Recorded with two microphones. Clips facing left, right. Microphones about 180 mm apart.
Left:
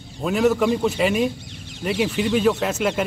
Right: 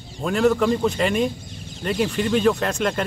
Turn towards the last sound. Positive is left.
turn(degrees=5)  # may be behind; listen again after turning